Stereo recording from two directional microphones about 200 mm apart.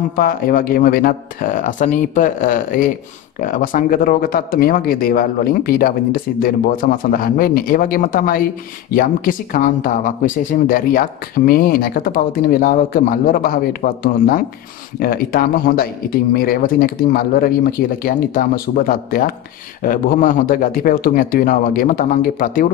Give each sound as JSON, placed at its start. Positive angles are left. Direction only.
{"t": 0.1, "sound": "speech", "side_deg": 45}